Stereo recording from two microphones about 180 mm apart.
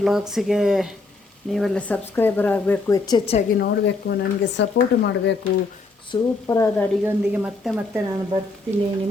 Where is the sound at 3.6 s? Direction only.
65° left (ahead or behind).